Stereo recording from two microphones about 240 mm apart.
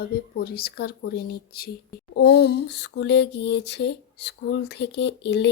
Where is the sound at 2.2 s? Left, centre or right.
Left.